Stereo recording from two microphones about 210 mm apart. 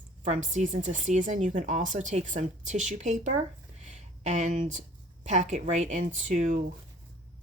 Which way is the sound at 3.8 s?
35° right (ahead or behind).